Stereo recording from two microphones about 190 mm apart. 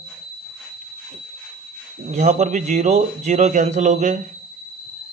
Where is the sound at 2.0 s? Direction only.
35° right (ahead or behind).